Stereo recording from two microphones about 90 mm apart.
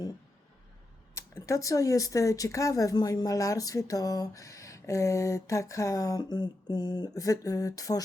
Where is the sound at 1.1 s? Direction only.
35° left (ahead or behind).